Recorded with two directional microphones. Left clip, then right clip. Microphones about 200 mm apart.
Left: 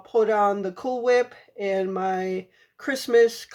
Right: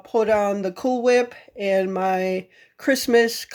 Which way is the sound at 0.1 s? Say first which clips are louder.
Right 1 dB; 40° right (ahead or behind).